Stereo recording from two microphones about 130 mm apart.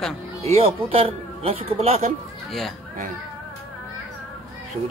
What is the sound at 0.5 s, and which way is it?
Speech, 50° right (ahead or behind).